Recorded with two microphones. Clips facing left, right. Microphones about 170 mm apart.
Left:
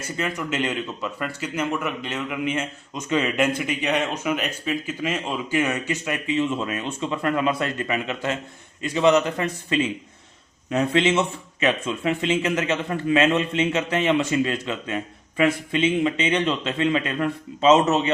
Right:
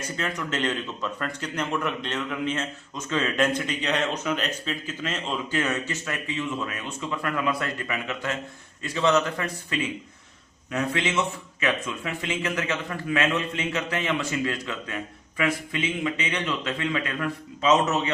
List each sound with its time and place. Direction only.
0.2 s speech: 10° left (ahead or behind); by 18.1 s 25° left (ahead or behind)